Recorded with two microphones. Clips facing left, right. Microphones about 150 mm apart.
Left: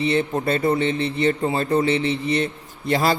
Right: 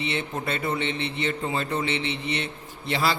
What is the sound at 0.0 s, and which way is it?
A man's voice, 40° left (ahead or behind).